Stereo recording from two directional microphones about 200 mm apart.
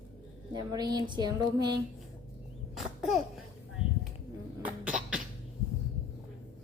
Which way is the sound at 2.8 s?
Centre (ahead or behind).